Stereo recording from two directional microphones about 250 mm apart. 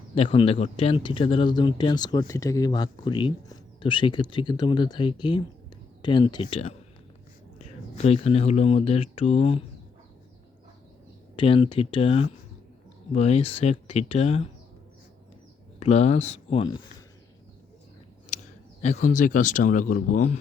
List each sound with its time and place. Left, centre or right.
0.1 s speech: left
7.9 s speech: left
11.3 s speech: left
15.8 s speech: left
18.3 s speech: left